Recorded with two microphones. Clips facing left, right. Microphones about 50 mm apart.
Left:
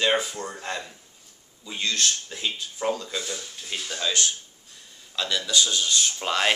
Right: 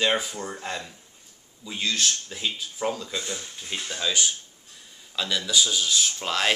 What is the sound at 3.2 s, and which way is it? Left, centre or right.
Speech, centre.